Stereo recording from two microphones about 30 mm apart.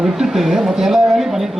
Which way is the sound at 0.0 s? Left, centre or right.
Centre.